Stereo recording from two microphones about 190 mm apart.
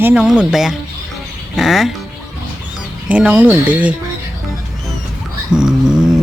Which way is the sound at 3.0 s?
5° right (ahead or behind).